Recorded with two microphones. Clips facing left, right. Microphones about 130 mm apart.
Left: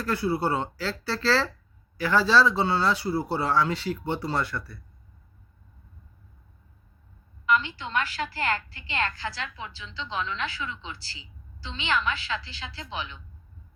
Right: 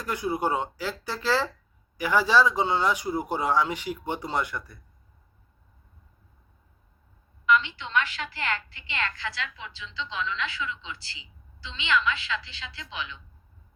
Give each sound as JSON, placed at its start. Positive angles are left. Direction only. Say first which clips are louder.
{"t": 0.0, "sound": "speech", "louder": "left 2 dB", "side_deg": -15}
{"t": 7.4, "sound": "a woman's voice", "louder": "right 1 dB", "side_deg": 40}